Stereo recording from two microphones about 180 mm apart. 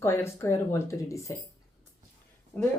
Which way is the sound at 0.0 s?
15° left (ahead or behind).